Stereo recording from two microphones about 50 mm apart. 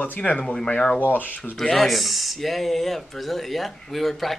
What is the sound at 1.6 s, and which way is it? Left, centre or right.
Speech, centre.